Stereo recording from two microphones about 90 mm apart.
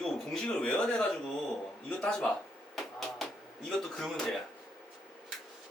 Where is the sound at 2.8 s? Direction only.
Centre (ahead or behind).